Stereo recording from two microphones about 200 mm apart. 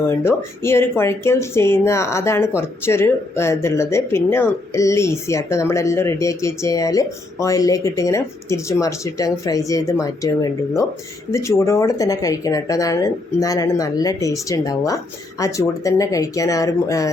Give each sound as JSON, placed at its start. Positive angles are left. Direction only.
{"t": 0.1, "sound": "speech", "side_deg": 10}